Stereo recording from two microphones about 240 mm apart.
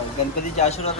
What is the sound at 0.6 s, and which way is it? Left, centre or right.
Speech, left.